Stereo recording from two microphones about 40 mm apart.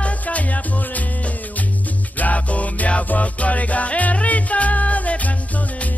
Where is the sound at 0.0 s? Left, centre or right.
Left.